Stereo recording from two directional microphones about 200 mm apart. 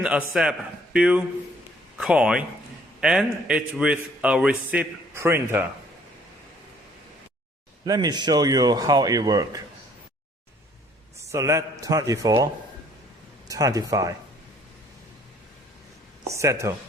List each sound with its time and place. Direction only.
0.0 s a man's voice: 5° right (ahead or behind)
7.9 s speech: 20° right (ahead or behind)
11.3 s a man's voice: 15° right (ahead or behind)
13.5 s a man's voice: 15° right (ahead or behind)
16.2 s a man's voice: 15° right (ahead or behind)